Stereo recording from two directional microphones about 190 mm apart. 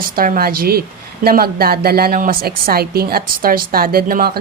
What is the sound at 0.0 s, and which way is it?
A woman's voice, 50° right (ahead or behind).